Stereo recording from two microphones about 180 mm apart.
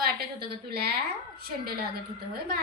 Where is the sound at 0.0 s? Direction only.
60° right (ahead or behind).